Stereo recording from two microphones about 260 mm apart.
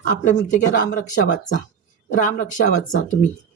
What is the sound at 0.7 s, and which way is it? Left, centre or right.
Speech, left.